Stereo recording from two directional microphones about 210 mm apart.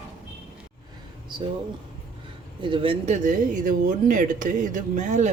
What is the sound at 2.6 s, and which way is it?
Speech, 25° right (ahead or behind).